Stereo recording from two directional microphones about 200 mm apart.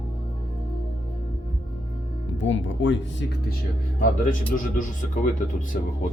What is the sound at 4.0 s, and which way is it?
Speech, 40° left (ahead or behind).